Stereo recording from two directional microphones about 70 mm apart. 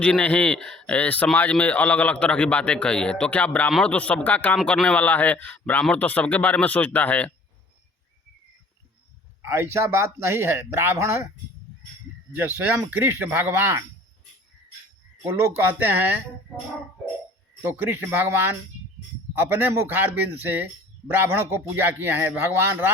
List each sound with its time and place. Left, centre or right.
0.0 s a man's voice: left
9.4 s speech: right
12.3 s speech: right
15.2 s speech: right
17.6 s speech: right